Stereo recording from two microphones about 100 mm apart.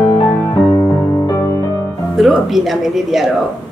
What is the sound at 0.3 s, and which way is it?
Music, 25° left (ahead or behind).